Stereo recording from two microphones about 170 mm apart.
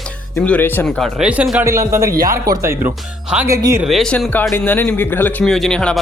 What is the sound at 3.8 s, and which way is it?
Speech, centre (ahead or behind).